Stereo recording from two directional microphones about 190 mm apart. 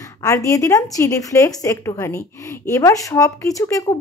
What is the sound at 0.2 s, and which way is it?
A woman's voice, 15° left (ahead or behind).